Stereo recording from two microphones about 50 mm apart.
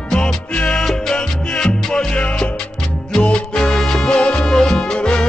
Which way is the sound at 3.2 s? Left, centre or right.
Left.